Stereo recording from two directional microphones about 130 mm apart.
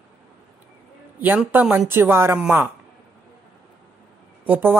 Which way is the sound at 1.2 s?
15° right (ahead or behind).